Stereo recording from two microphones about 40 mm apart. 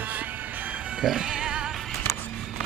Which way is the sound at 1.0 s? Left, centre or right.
Centre.